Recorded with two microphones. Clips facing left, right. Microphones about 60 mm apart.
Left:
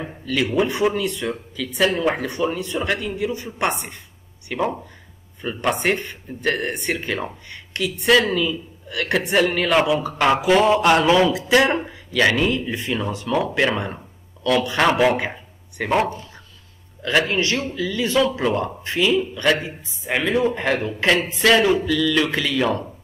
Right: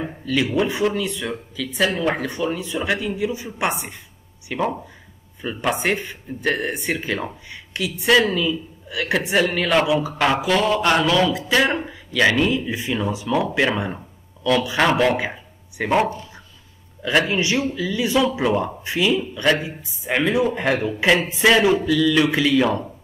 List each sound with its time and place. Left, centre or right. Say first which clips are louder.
0.0 s speech: right 1 dB; centre
10.4 s a sound: left 3 dB; centre
11.1 s speech: left 2 dB; left
11.3 s speech: left 2 dB; centre
17.3 s a man's voice: right 1 dB; centre